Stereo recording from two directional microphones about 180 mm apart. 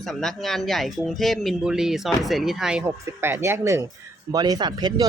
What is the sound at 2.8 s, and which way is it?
Speech, 15° right (ahead or behind).